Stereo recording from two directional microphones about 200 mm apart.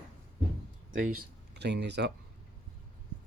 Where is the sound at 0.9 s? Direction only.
40° right (ahead or behind); by 2.1 s 60° right (ahead or behind).